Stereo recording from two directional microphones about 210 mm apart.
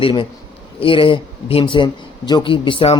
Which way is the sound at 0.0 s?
25° left (ahead or behind).